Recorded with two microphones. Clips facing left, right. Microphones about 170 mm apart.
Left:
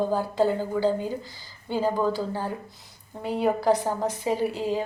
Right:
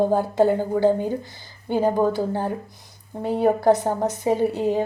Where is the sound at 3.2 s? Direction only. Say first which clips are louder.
Right 5 dB; 25° right (ahead or behind).